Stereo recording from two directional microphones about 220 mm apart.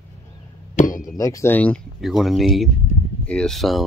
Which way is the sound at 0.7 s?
35° left (ahead or behind).